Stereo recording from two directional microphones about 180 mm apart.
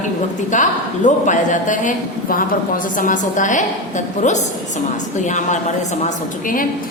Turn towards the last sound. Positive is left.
turn(degrees=40)  # may be behind; listen again after turning